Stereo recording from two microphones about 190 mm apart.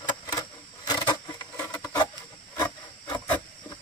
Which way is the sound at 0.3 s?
20° left (ahead or behind).